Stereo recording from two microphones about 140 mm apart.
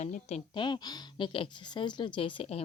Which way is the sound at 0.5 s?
35° left (ahead or behind).